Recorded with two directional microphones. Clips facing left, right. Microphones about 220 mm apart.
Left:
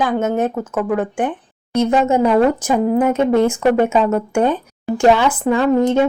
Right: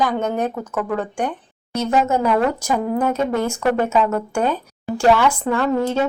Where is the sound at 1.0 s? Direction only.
5° left (ahead or behind).